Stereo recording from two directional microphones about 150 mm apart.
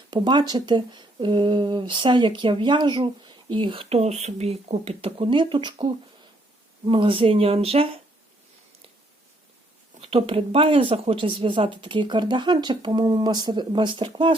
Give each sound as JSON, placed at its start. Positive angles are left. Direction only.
{"t": 0.1, "sound": "speech", "side_deg": -30}
{"t": 10.0, "sound": "speech", "side_deg": -40}